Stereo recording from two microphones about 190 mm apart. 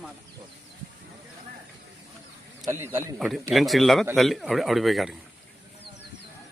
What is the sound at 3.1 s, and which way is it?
A man's voice, centre (ahead or behind).